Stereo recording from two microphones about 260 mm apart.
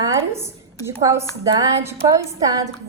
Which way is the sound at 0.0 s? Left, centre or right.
Centre.